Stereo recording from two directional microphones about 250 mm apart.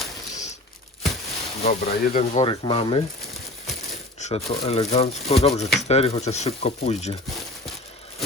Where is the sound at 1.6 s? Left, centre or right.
Left.